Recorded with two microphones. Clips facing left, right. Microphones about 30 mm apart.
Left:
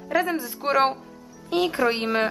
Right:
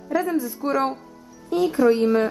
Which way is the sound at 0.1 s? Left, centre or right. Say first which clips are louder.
Right 1 dB; left.